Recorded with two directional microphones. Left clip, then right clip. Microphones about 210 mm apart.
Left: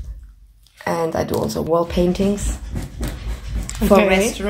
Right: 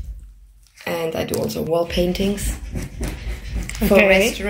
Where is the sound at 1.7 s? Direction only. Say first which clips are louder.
Left 2 dB; 40° left (ahead or behind).